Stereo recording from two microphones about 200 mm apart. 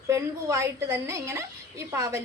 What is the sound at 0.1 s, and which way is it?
A woman's voice, 15° right (ahead or behind).